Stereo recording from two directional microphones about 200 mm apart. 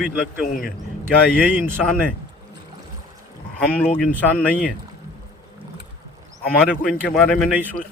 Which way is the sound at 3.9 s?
10° left (ahead or behind).